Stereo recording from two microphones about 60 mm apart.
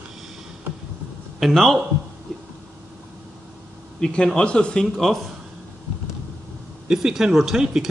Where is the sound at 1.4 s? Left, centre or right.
Centre.